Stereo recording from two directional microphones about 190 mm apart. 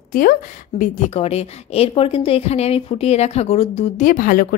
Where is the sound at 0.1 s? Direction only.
50° left (ahead or behind).